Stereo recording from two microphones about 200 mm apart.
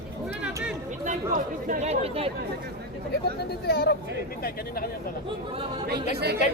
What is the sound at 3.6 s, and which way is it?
Speech, 50° left (ahead or behind).